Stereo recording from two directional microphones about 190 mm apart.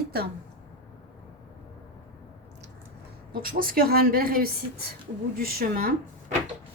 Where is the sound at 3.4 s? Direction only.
50° right (ahead or behind).